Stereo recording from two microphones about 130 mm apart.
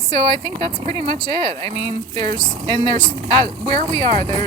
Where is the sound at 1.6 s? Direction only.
40° right (ahead or behind).